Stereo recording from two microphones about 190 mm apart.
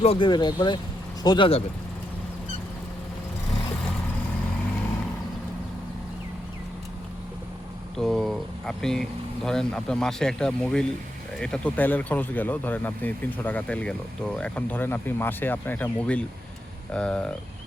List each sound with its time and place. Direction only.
0.0 s speech: 30° left (ahead or behind)
7.9 s speech: centre (ahead or behind)